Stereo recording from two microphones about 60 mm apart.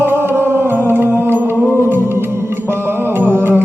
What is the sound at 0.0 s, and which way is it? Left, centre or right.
Music, right.